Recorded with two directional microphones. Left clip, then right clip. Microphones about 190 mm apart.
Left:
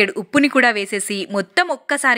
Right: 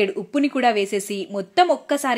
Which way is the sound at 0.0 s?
15° left (ahead or behind).